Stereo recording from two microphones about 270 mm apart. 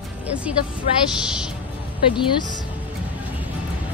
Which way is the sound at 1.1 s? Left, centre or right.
Centre.